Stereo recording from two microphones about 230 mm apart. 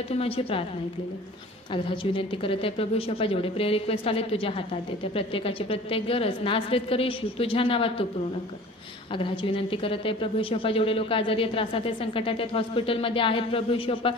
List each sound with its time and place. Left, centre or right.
0.1 s a woman's voice: left
1.7 s a woman's voice: left
9.1 s a woman's voice: left